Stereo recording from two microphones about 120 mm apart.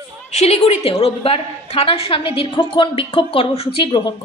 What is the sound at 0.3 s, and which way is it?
A woman's voice, 65° left (ahead or behind).